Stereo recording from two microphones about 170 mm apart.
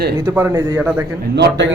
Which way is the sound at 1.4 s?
90° right.